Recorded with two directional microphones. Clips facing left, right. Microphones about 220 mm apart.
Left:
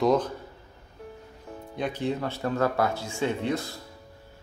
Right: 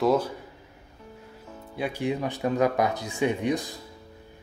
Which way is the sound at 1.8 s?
10° right (ahead or behind).